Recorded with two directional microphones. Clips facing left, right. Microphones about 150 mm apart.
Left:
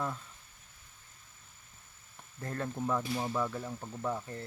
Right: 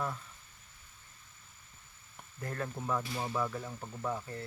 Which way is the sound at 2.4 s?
30° left (ahead or behind).